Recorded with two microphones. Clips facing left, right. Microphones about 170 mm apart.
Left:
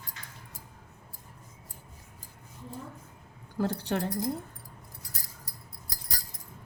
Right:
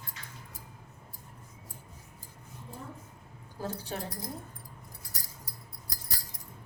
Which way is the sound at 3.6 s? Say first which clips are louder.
Left 7 dB; 70° left (ahead or behind).